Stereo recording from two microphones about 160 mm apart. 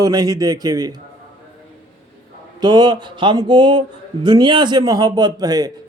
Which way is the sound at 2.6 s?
25° right (ahead or behind).